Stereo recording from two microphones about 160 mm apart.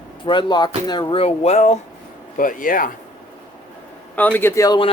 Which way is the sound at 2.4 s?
60° left (ahead or behind).